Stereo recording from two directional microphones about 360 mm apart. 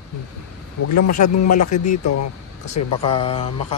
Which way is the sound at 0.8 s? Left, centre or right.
Left.